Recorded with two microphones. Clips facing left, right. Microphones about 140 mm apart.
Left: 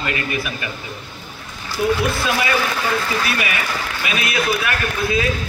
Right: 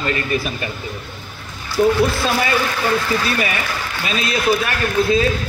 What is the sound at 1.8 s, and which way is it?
Speech, 40° right (ahead or behind).